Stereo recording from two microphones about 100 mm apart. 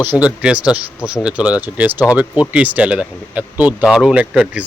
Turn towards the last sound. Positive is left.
turn(degrees=-10)  # may be behind; listen again after turning